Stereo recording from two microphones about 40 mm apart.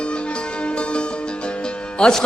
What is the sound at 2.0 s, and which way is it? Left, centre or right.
Music, left.